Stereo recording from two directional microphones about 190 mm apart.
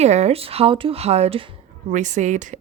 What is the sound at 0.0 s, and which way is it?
A woman's voice, 35° right (ahead or behind).